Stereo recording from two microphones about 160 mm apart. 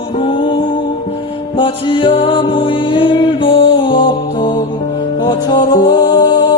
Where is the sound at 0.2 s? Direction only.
30° left (ahead or behind).